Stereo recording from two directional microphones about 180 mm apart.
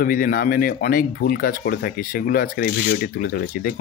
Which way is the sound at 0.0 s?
50° left (ahead or behind).